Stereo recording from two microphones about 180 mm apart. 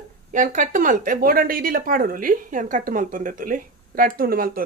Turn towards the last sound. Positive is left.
turn(degrees=-55)  # may be behind; listen again after turning